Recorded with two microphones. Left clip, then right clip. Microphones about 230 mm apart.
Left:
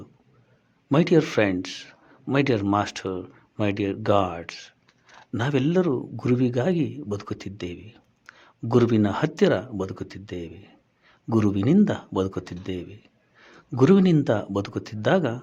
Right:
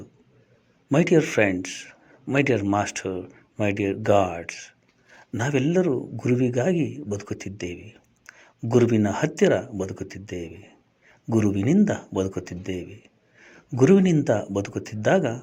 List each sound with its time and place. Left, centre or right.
0.9 s speech: centre